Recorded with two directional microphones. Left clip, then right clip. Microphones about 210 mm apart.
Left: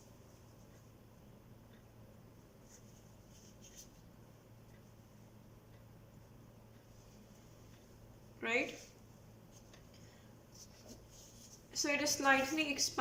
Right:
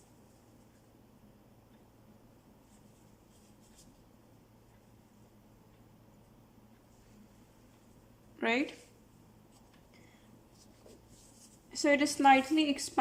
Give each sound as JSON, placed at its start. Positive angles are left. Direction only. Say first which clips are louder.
{"t": 8.4, "sound": "speech", "louder": "right 4 dB", "side_deg": -50}
{"t": 11.7, "sound": "a woman's voice", "louder": "right 7 dB", "side_deg": -50}